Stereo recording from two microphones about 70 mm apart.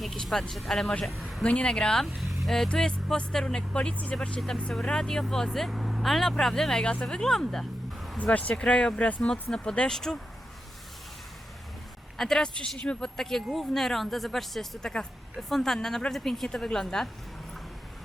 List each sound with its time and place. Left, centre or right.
0.0 s speech: centre
1.5 s speech: centre
2.0 s speech: centre
8.2 s speech: left
12.1 s speech: centre